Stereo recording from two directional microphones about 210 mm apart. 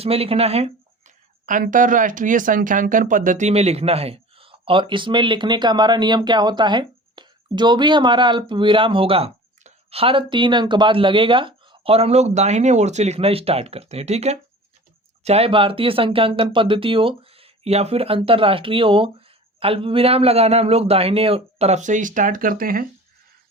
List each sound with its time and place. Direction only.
0.0 s speech: 30° right (ahead or behind); by 22.9 s 45° right (ahead or behind)